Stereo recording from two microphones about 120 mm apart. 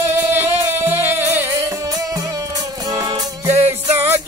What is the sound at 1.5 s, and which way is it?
Music, 30° right (ahead or behind).